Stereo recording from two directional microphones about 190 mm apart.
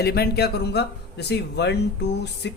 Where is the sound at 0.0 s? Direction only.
55° left (ahead or behind).